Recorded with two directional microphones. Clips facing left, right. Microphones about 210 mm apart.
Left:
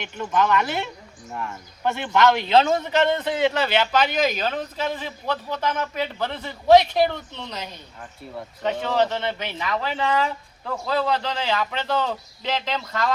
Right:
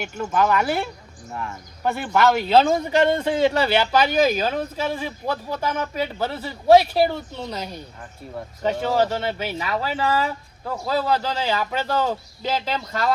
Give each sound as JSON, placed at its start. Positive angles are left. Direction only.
{"t": 0.0, "sound": "speech", "side_deg": -5}
{"t": 1.3, "sound": "speech", "side_deg": 5}
{"t": 1.8, "sound": "speech", "side_deg": -5}
{"t": 2.6, "sound": "speech", "side_deg": -40}
{"t": 3.1, "sound": "speech", "side_deg": -10}
{"t": 8.6, "sound": "speech", "side_deg": -10}